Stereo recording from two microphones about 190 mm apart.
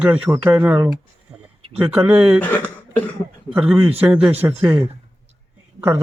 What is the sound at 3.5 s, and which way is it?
Speech, 5° right (ahead or behind).